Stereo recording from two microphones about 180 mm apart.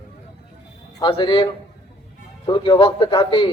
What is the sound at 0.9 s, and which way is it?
A man's voice, 25° left (ahead or behind).